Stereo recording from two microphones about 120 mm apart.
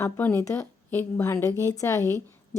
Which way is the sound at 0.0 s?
20° left (ahead or behind).